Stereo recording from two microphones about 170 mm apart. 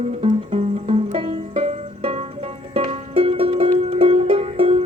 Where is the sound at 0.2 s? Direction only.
35° right (ahead or behind).